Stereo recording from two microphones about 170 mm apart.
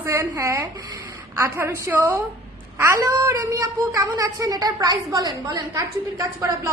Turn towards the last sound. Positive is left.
turn(degrees=-20)  # may be behind; listen again after turning